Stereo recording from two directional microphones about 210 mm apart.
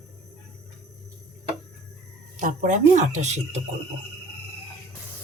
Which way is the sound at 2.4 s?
35° right (ahead or behind).